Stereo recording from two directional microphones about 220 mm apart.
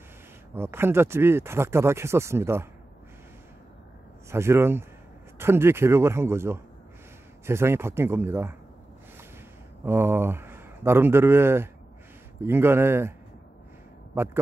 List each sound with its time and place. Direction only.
0.6 s speech: 10° right (ahead or behind)
4.3 s speech: 10° right (ahead or behind)
9.8 s speech: 10° right (ahead or behind)
14.1 s speech: 10° right (ahead or behind)